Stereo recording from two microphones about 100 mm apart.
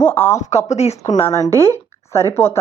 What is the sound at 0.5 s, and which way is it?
Speech, 90° left.